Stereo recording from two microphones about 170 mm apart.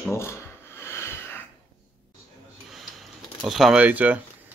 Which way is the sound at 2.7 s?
Centre (ahead or behind).